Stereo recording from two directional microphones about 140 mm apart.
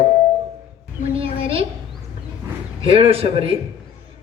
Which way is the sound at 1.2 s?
40° right (ahead or behind).